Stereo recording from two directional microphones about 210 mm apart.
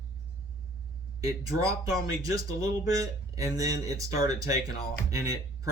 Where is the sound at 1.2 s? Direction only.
15° right (ahead or behind).